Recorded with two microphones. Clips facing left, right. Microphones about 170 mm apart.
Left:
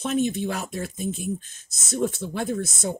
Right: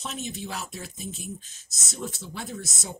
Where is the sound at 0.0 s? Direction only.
55° left (ahead or behind).